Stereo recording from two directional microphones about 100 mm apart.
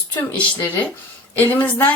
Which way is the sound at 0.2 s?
15° left (ahead or behind).